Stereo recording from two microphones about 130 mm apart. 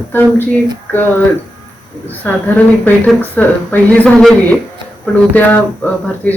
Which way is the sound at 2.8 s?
15° left (ahead or behind).